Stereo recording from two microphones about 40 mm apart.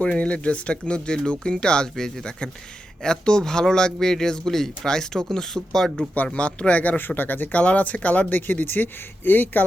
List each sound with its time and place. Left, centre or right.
0.2 s speech: left; by 6.1 s centre
6.2 s speech: left
7.0 s speech: left
7.5 s speech: left
7.8 s speech: left
8.3 s speech: left